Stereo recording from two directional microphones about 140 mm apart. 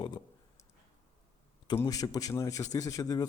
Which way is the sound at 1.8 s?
25° left (ahead or behind).